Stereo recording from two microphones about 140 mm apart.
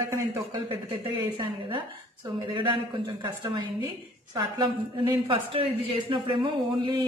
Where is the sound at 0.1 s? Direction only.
20° right (ahead or behind).